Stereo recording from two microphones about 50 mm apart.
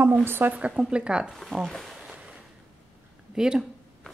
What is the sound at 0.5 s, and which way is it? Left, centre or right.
Rub, right.